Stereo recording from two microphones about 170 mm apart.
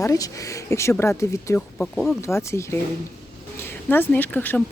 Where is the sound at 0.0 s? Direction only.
20° left (ahead or behind).